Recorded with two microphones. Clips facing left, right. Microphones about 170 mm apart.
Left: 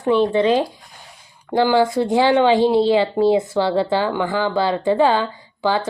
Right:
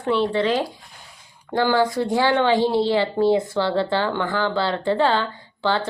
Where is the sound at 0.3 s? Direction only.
15° left (ahead or behind).